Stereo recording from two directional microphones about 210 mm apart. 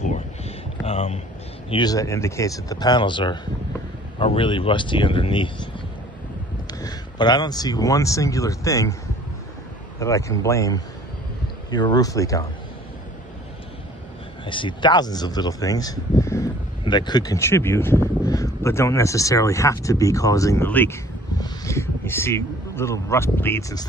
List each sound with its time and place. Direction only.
0.8 s speech: 30° left (ahead or behind)
1.7 s speech: 20° left (ahead or behind)
6.7 s speech: 20° left (ahead or behind)
9.9 s speech: 15° left (ahead or behind)
14.4 s speech: 25° left (ahead or behind)